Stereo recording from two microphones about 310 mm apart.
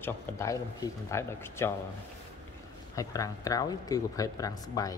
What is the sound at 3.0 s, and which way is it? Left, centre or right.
Speech, centre.